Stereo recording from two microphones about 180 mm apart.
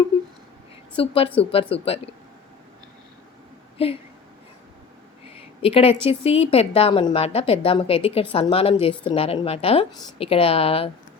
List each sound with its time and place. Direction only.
0.9 s speech: 30° left (ahead or behind)
3.8 s speech: 30° left (ahead or behind)
5.6 s speech: 30° left (ahead or behind)